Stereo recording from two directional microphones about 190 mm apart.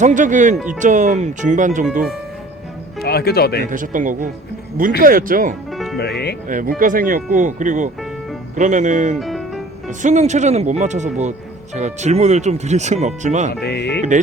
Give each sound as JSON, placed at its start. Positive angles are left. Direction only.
{"t": 0.0, "sound": "speech", "side_deg": -40}
{"t": 3.0, "sound": "speech", "side_deg": 55}
{"t": 3.7, "sound": "speech", "side_deg": -45}
{"t": 5.7, "sound": "music", "side_deg": 0}
{"t": 6.5, "sound": "speech", "side_deg": -45}
{"t": 9.1, "sound": "speech", "side_deg": 0}
{"t": 10.0, "sound": "speech", "side_deg": -40}
{"t": 13.7, "sound": "music", "side_deg": 60}